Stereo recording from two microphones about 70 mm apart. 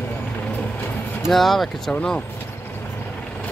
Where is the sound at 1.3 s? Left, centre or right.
Centre.